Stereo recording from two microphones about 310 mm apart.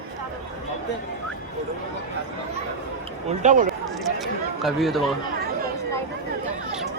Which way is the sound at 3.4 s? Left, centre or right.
Right.